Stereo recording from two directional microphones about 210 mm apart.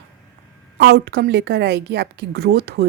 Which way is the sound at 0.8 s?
55° right (ahead or behind).